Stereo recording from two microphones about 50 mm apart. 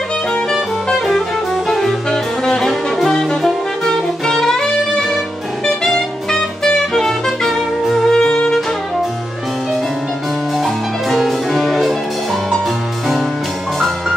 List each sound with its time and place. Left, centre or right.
0.3 s music: centre
3.4 s saxophone: centre
8.2 s music: centre
10.6 s music: centre